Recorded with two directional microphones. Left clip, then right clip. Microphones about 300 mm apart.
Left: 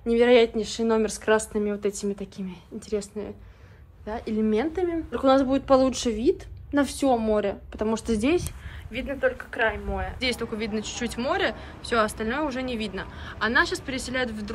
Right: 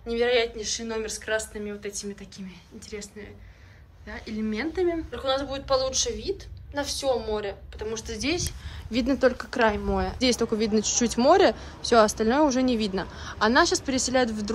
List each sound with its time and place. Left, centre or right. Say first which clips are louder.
0.0 s speech: left 5 dB; centre
5.1 s a woman's voice: left 6 dB; centre
9.2 s speech: right 1 dB; centre